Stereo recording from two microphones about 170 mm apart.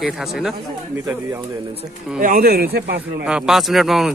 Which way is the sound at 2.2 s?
55° right (ahead or behind).